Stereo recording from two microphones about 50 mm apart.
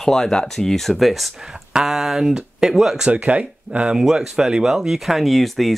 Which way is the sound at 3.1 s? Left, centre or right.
Right.